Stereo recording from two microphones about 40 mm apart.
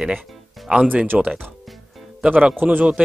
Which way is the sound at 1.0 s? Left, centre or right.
Right.